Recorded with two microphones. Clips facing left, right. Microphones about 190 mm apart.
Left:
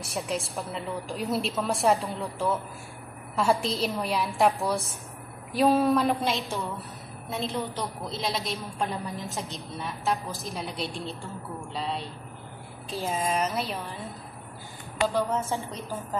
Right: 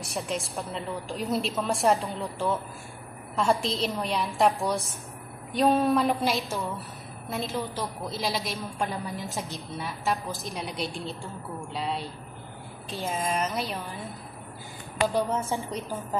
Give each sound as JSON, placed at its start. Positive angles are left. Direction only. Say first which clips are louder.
{"t": 0.0, "sound": "a woman's voice", "louder": "left 1 dB", "side_deg": 0}
{"t": 15.1, "sound": "a woman's voice", "louder": "even", "side_deg": -15}